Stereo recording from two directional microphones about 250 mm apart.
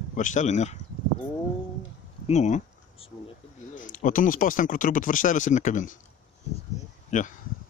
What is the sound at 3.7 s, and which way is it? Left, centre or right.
Speech, left.